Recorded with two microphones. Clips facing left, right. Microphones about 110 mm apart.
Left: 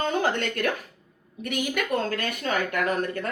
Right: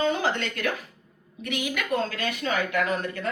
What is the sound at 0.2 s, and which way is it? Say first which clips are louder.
Speech: left 2 dB; 50° left (ahead or behind).